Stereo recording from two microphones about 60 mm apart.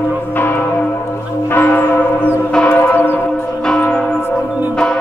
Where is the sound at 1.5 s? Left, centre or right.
Left.